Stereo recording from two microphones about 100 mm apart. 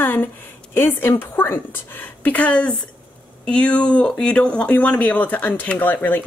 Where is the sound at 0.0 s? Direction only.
20° left (ahead or behind).